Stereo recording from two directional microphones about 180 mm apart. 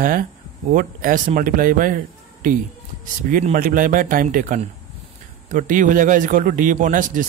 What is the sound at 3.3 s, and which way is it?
Speech, 50° right (ahead or behind).